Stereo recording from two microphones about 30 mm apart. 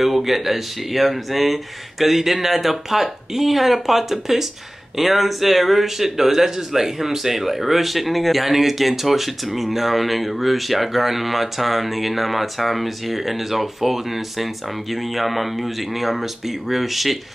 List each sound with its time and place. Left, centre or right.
0.0 s speech: centre